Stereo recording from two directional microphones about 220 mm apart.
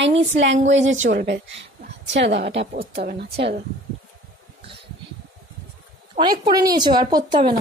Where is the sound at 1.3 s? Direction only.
55° right (ahead or behind).